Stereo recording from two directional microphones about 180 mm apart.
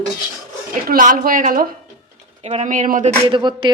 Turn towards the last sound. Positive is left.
turn(degrees=-25)  # may be behind; listen again after turning